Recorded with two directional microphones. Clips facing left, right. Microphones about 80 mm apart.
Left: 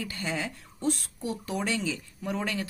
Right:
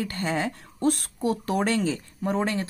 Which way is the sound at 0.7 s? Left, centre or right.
Right.